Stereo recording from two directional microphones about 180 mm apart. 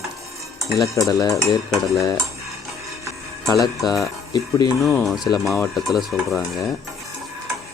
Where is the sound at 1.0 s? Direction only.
15° left (ahead or behind).